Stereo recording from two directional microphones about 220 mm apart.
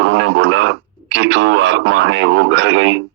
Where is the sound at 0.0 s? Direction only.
55° right (ahead or behind).